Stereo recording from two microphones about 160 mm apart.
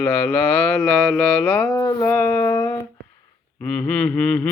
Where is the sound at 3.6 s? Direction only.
5° left (ahead or behind).